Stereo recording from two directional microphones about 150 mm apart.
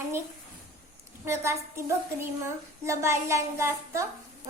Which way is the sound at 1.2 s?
15° right (ahead or behind).